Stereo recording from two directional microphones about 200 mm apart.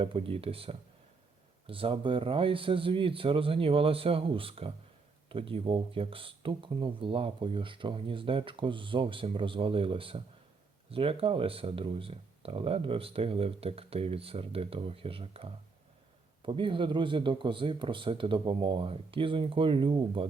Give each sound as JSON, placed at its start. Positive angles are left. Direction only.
{"t": 0.0, "sound": "speech", "side_deg": -25}